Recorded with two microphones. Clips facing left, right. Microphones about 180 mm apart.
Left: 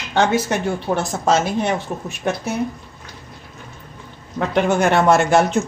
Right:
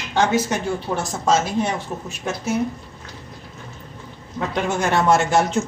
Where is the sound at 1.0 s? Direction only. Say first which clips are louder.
Left 1 dB; 60° left (ahead or behind).